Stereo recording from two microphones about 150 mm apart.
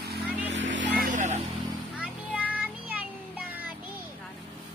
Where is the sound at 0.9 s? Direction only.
60° right (ahead or behind).